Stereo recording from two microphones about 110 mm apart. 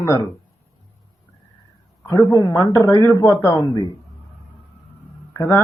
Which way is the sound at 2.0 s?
25° left (ahead or behind).